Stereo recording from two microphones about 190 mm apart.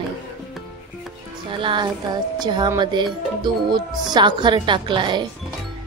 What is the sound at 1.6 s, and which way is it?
Speech, 25° right (ahead or behind).